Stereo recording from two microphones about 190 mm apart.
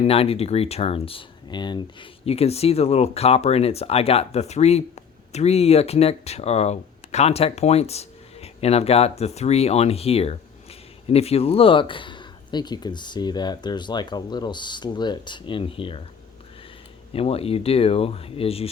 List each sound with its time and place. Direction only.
0.0 s speech: 30° left (ahead or behind)
17.2 s speech: 30° left (ahead or behind)